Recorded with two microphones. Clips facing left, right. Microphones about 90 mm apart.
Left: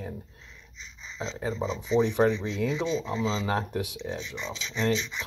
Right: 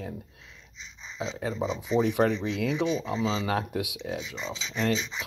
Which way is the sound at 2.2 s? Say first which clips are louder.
Left 1 dB; 20° left (ahead or behind).